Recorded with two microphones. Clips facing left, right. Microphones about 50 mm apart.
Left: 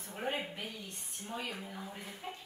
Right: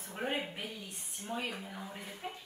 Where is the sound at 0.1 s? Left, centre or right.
Centre.